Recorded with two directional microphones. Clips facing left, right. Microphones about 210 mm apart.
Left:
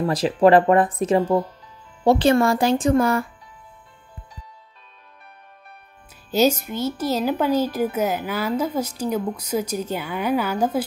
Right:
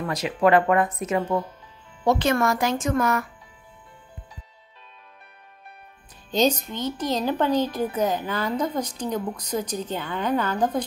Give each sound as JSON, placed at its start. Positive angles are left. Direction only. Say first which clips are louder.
{"t": 0.0, "sound": "speech", "louder": "left 5 dB", "side_deg": 30}
{"t": 6.3, "sound": "a woman's voice", "louder": "left 3 dB", "side_deg": 10}